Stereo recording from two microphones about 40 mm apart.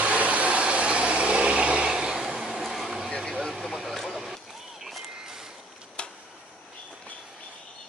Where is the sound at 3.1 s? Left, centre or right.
Centre.